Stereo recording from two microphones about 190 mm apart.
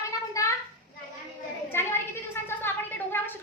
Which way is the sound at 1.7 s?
10° left (ahead or behind).